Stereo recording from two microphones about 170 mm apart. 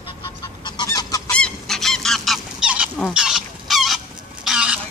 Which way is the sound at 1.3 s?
5° left (ahead or behind).